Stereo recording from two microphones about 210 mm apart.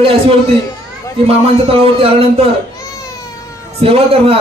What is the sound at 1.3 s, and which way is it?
Speech, 25° right (ahead or behind).